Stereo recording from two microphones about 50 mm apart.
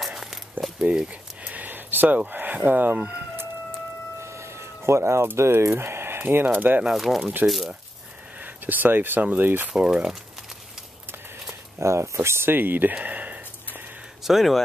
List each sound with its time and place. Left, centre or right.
0.2 s walk: centre
0.9 s a sound: right
2.3 s speech: right
4.2 s music: right
5.7 s speech: right
6.9 s speech: centre
8.4 s speech: right
9.7 s speech: right
11.8 s speech: right
12.9 s a sound: right
14.2 s speech: centre